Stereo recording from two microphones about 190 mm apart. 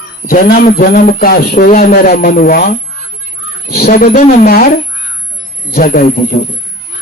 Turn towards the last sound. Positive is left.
turn(degrees=45)  # may be behind; listen again after turning